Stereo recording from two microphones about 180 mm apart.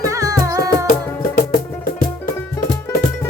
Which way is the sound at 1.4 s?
55° left (ahead or behind).